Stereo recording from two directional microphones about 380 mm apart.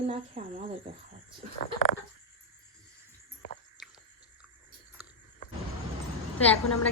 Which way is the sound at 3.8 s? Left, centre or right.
Centre.